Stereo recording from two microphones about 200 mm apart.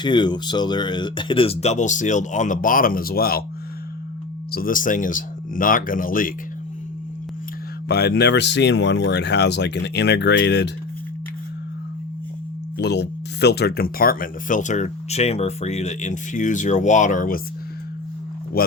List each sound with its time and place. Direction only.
0.0 s speech: 20° left (ahead or behind); by 3.4 s 50° left (ahead or behind)
4.5 s speech: 45° left (ahead or behind)
7.9 s speech: 55° left (ahead or behind)
12.7 s speech: 55° left (ahead or behind)
18.6 s speech: 50° left (ahead or behind)